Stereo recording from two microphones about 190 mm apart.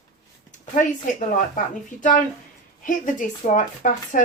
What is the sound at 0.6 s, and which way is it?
Speech, 40° left (ahead or behind).